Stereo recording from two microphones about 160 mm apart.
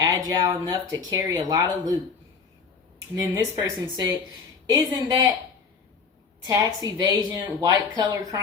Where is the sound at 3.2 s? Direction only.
20° right (ahead or behind).